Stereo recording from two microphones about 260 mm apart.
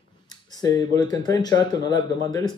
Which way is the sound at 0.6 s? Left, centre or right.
Centre.